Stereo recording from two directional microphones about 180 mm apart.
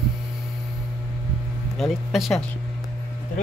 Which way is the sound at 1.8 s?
Centre (ahead or behind).